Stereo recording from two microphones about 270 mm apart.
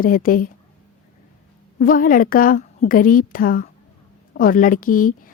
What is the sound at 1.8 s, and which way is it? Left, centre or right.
A woman's voice, left.